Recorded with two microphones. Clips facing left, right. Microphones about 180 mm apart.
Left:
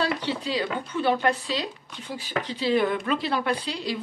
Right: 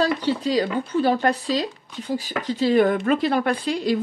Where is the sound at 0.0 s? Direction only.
40° right (ahead or behind).